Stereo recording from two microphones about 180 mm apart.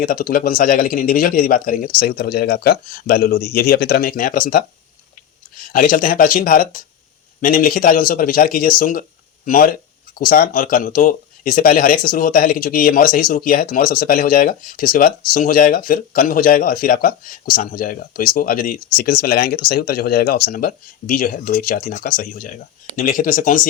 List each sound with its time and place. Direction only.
0.0 s speech: 50° left (ahead or behind)